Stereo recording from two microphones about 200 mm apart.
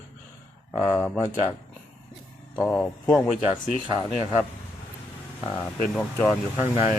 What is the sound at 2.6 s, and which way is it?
Speech, 5° left (ahead or behind).